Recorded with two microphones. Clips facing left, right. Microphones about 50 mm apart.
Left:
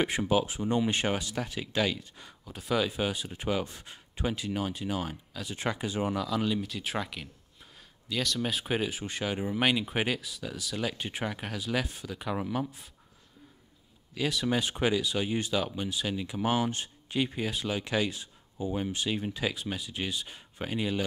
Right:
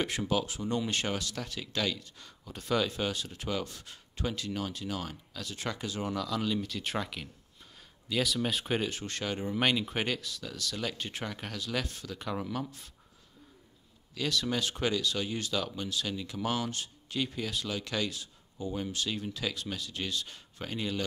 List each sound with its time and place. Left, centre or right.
0.0 s speech: centre
2.4 s speech: centre
6.2 s speech: centre
14.1 s speech: centre